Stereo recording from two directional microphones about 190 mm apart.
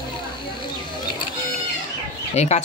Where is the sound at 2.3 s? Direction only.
35° left (ahead or behind).